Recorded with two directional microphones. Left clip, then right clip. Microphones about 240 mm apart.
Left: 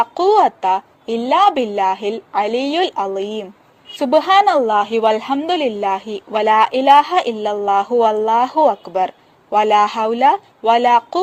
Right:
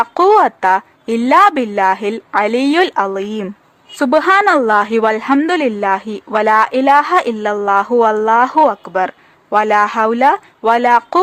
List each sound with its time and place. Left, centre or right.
0.0 s a woman's voice: centre